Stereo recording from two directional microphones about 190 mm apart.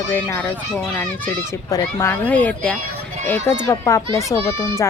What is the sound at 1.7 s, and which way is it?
A child's voice, 15° left (ahead or behind).